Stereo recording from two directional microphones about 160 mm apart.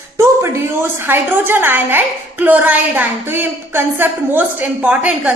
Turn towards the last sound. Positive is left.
turn(degrees=-10)  # may be behind; listen again after turning